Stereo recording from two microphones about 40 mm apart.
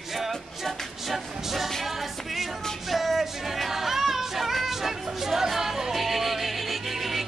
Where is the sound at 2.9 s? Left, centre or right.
Centre.